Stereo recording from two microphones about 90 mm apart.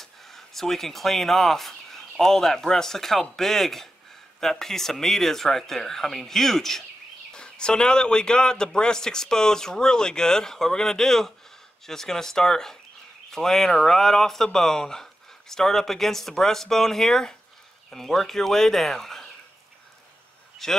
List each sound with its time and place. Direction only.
0.0 s speech: 5° left (ahead or behind)
20.6 s speech: 5° left (ahead or behind)